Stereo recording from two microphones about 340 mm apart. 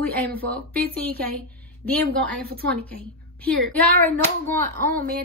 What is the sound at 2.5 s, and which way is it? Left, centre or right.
Speech, right.